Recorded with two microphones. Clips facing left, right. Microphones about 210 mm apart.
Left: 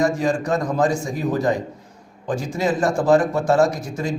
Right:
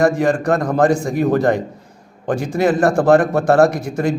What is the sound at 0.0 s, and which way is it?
A man's voice, 60° right (ahead or behind).